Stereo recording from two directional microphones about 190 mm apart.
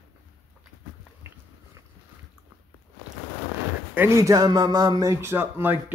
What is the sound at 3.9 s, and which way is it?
A man's voice, 15° right (ahead or behind).